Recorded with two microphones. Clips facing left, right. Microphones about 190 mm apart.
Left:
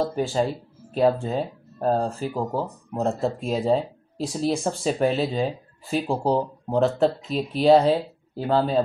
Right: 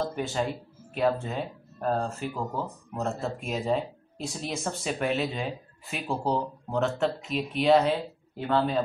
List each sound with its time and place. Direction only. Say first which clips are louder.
0.0 s speech: left 6 dB; 30° left (ahead or behind)